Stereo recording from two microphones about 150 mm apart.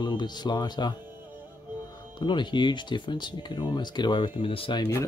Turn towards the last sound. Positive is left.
turn(degrees=30)  # may be behind; listen again after turning